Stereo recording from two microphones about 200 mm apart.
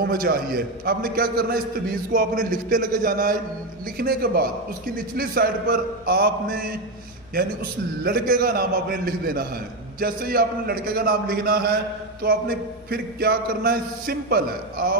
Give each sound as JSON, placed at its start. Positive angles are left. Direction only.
{"t": 0.0, "sound": "a man's voice", "side_deg": -50}
{"t": 8.0, "sound": "a man's voice", "side_deg": -50}